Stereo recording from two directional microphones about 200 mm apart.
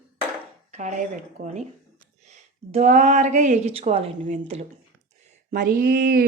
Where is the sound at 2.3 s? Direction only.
35° right (ahead or behind).